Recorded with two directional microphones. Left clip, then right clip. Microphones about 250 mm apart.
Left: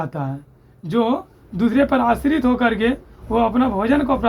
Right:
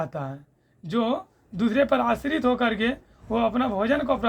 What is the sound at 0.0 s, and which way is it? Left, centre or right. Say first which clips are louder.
Speech: left 4 dB; right.